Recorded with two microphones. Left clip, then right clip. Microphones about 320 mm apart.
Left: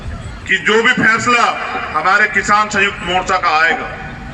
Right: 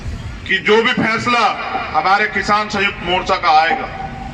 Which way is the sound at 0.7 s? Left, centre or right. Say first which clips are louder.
Left 1 dB; left.